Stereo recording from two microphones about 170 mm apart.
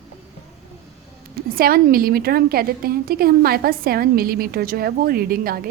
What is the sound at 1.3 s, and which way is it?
A woman's voice, 60° right (ahead or behind).